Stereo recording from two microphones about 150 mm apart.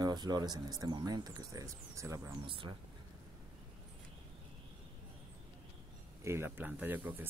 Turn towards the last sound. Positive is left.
turn(degrees=-10)  # may be behind; listen again after turning